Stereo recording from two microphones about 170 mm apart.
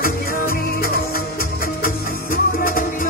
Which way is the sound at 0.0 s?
60° left (ahead or behind).